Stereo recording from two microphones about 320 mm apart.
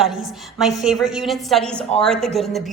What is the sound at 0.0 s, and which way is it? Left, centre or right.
A woman's voice, centre.